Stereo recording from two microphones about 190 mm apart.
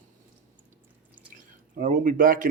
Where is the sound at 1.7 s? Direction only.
45° right (ahead or behind).